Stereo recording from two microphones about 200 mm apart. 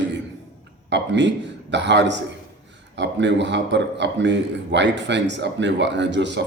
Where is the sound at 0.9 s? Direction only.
60° right (ahead or behind).